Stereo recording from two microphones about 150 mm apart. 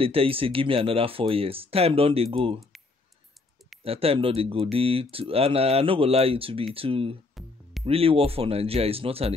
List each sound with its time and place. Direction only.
0.0 s speech: 40° right (ahead or behind)
3.8 s speech: 40° right (ahead or behind)
7.4 s music: centre (ahead or behind)
7.8 s speech: 40° right (ahead or behind)